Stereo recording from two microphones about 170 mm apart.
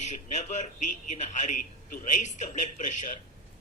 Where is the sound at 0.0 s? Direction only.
45° left (ahead or behind).